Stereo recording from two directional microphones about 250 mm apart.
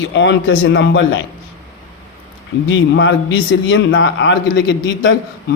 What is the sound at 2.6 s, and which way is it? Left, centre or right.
A man's voice, left.